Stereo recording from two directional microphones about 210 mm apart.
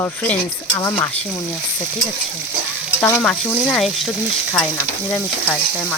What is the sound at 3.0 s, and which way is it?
Stir, 10° left (ahead or behind).